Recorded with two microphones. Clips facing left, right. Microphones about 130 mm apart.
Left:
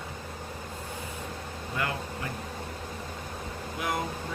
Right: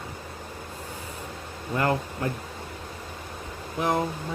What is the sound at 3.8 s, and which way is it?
Speech, 35° right (ahead or behind).